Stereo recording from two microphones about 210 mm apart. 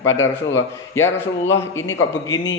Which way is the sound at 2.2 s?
15° left (ahead or behind).